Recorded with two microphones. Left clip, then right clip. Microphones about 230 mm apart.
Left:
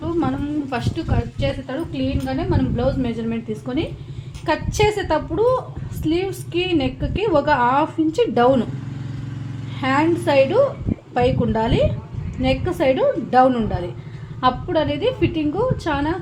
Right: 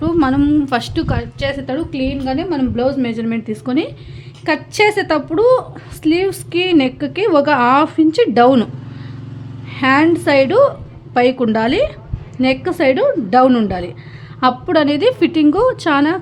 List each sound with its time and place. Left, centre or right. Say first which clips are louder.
0.0 s a woman's voice: right 8 dB; right
9.7 s a woman's voice: right 6 dB; right